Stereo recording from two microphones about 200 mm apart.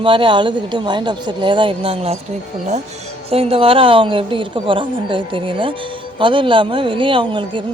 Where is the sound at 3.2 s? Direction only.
30° right (ahead or behind).